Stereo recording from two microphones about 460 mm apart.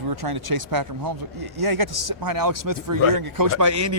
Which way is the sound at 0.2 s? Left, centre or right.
Right.